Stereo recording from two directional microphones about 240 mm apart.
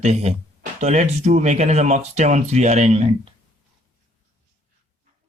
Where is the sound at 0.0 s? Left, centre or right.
Right.